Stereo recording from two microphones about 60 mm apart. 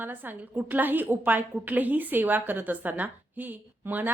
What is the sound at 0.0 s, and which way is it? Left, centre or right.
A woman's voice, right.